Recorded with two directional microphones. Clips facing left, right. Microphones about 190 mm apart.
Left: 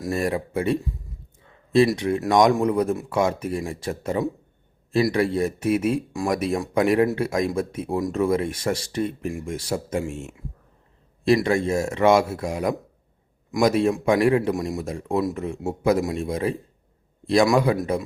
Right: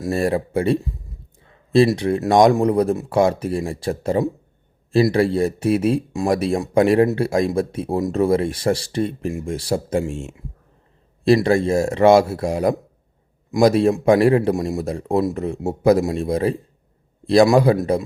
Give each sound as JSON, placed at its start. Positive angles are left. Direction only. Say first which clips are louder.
{"t": 0.0, "sound": "speech", "louder": "right 4 dB", "side_deg": -30}